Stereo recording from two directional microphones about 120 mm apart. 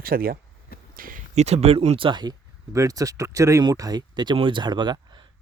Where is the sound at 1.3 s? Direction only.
65° right (ahead or behind).